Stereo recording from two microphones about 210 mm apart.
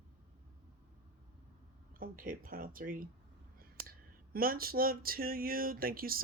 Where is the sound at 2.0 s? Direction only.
40° right (ahead or behind).